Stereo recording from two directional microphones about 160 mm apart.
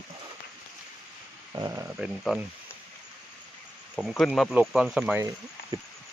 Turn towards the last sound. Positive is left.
turn(degrees=-20)  # may be behind; listen again after turning